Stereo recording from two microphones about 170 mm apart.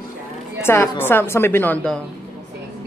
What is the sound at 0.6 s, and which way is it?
A woman's voice, 15° left (ahead or behind).